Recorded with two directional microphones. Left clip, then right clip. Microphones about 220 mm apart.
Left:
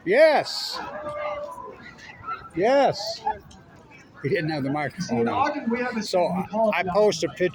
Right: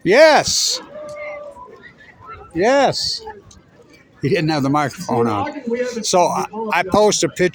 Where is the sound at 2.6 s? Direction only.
55° right (ahead or behind).